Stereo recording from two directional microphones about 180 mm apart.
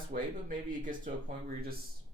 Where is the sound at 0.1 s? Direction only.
50° right (ahead or behind).